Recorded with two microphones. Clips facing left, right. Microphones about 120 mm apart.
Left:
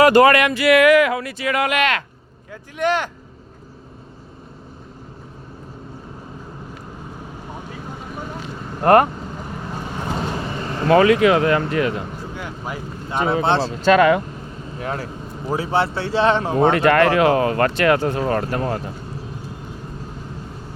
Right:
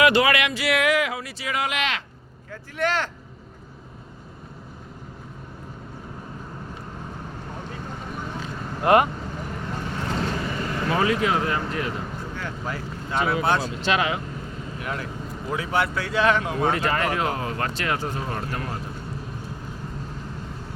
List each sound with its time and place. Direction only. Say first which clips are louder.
0.0 s speech: left 7 dB; 45° left (ahead or behind)
2.5 s speech: left 5 dB; 15° left (ahead or behind)
8.8 s speech: left 5 dB; 45° left (ahead or behind)
9.7 s vehicle: left 2 dB; 15° left (ahead or behind)
10.8 s speech: left 10 dB; 75° left (ahead or behind)
12.3 s speech: left 1 dB; 15° left (ahead or behind); by 13.9 s 30° left (ahead or behind)
13.9 s speech: left 10 dB; 55° left (ahead or behind)
14.8 s speech: left 5 dB; 35° left (ahead or behind)
16.7 s speech: left 9 dB; 70° left (ahead or behind)